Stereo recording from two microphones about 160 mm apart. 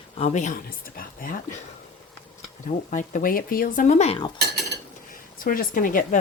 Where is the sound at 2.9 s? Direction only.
55° left (ahead or behind).